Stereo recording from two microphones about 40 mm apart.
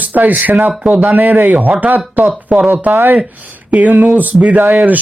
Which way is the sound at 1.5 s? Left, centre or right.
Right.